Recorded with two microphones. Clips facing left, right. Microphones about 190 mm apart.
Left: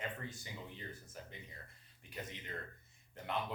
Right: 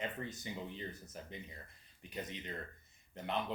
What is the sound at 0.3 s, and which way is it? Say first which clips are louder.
Speech: right 5 dB; 20° right (ahead or behind).